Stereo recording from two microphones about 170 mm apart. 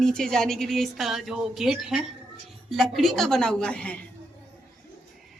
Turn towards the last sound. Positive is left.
turn(degrees=5)  # may be behind; listen again after turning